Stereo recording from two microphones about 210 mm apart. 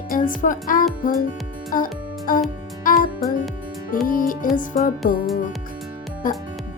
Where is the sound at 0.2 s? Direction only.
40° left (ahead or behind).